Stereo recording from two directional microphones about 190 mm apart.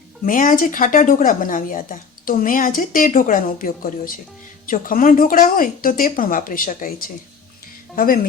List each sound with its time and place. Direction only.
0.3 s speech: 45° left (ahead or behind)
7.9 s speech: 50° left (ahead or behind)